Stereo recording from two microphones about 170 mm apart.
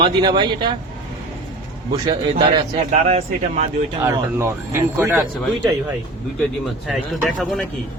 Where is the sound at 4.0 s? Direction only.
15° right (ahead or behind).